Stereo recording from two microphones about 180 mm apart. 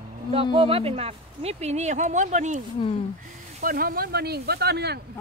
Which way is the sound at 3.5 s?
50° right (ahead or behind).